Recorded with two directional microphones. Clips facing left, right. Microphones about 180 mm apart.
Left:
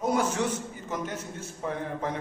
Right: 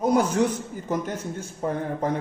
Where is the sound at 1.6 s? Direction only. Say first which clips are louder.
Right 5 dB; 40° right (ahead or behind).